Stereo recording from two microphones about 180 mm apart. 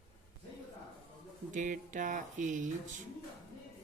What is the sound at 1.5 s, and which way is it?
Speech, 45° right (ahead or behind).